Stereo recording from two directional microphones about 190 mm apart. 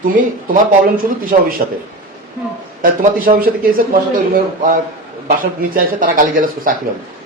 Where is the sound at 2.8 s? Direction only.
45° right (ahead or behind).